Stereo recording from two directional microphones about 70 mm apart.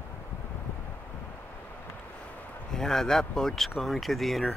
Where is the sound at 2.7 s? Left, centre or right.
Centre.